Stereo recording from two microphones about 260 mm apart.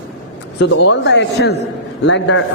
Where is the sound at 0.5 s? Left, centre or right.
Left.